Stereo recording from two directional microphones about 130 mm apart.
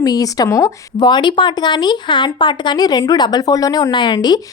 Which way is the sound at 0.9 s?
35° left (ahead or behind).